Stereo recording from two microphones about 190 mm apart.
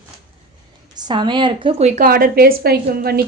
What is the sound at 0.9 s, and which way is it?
A woman's voice, 20° right (ahead or behind).